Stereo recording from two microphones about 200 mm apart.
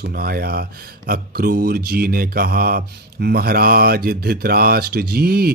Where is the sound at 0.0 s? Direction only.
50° right (ahead or behind).